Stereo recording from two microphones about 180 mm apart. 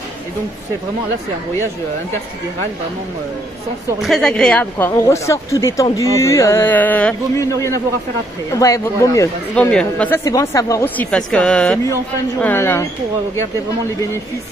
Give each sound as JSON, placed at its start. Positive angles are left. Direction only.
{"t": 4.0, "sound": "speech", "side_deg": 0}
{"t": 9.7, "sound": "speech", "side_deg": 5}